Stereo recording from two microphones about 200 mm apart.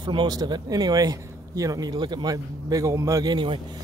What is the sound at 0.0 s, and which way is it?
Speech, 25° right (ahead or behind).